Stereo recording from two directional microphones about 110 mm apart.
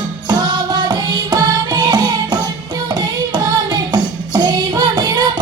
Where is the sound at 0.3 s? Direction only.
40° right (ahead or behind).